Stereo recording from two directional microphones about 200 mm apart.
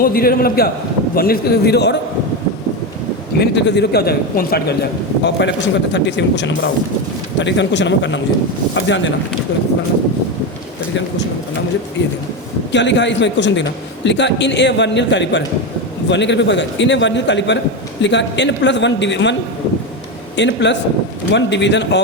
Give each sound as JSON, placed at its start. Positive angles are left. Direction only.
{"t": 0.0, "sound": "a man's voice", "side_deg": 45}
{"t": 3.3, "sound": "a man's voice", "side_deg": 55}
{"t": 12.7, "sound": "a man's voice", "side_deg": 60}